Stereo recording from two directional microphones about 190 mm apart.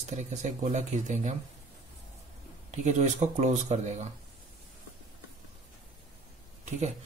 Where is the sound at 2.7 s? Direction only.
40° right (ahead or behind).